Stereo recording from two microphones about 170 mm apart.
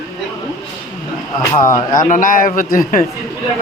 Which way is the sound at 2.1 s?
50° left (ahead or behind).